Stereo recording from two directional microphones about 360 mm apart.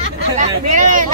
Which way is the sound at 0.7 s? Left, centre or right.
Right.